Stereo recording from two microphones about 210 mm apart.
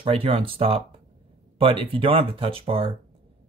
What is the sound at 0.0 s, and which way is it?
Speech, 25° right (ahead or behind).